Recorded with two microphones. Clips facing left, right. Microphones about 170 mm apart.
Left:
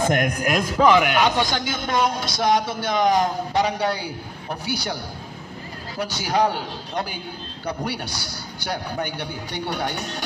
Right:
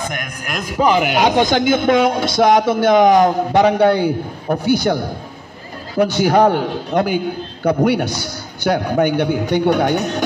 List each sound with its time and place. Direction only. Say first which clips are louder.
0.8 s speech: right 1 dB; 20° right (ahead or behind)
1.1 s speech: right 6 dB; 45° right (ahead or behind)